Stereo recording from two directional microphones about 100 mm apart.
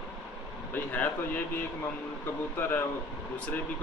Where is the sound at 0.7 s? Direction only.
20° left (ahead or behind).